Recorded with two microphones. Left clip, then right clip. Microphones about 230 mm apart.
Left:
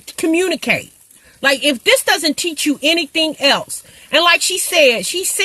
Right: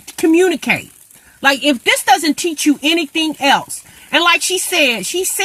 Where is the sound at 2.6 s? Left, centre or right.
Centre.